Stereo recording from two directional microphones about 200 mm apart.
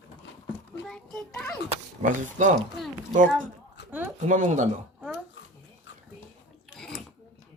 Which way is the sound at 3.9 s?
10° right (ahead or behind).